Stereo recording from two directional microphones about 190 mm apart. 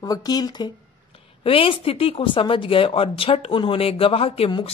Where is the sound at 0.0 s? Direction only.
20° left (ahead or behind).